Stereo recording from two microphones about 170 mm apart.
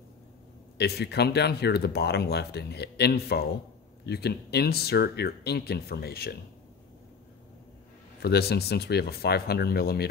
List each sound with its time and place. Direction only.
0.7 s speech: 75° left (ahead or behind)
8.2 s speech: 70° left (ahead or behind)